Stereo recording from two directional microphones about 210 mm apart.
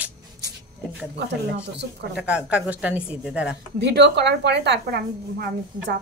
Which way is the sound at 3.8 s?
55° right (ahead or behind).